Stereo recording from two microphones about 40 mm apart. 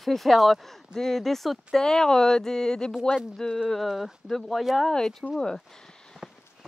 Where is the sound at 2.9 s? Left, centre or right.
Centre.